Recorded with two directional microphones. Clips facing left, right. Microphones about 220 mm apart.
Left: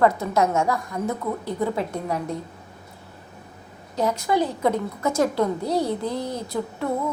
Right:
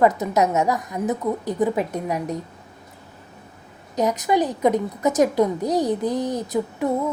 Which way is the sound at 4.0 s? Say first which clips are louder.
Right 2 dB; 15° right (ahead or behind).